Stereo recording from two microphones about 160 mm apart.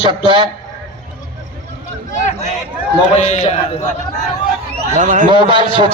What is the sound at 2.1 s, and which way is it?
A man's voice, 45° left (ahead or behind).